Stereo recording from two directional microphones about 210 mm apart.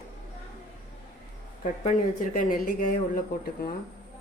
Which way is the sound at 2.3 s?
40° left (ahead or behind).